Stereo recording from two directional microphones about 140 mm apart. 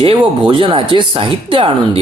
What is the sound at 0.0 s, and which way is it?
Speech, 35° right (ahead or behind).